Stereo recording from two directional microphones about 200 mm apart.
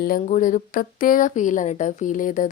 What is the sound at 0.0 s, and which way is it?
A woman's voice, 45° left (ahead or behind).